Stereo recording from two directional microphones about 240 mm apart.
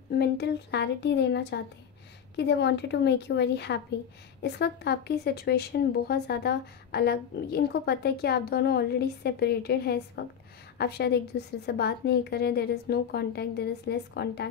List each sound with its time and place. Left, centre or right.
0.1 s a woman's voice: left